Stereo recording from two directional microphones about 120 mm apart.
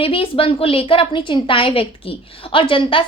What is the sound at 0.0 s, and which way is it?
A woman's voice, 50° left (ahead or behind).